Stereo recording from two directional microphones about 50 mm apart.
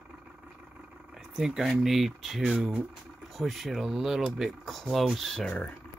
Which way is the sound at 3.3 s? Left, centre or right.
Centre.